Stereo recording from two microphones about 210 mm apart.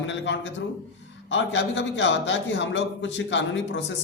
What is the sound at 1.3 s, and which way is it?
A man's voice, 60° left (ahead or behind).